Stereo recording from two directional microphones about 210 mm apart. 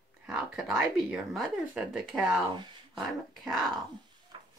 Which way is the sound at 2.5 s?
20° right (ahead or behind).